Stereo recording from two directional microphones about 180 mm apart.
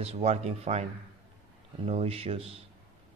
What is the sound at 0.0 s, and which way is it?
Speech, 35° right (ahead or behind).